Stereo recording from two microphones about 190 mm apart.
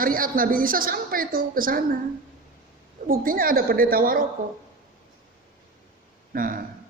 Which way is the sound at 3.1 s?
50° right (ahead or behind).